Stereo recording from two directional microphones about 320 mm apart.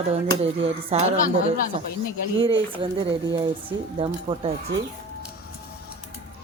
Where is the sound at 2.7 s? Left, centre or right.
Centre.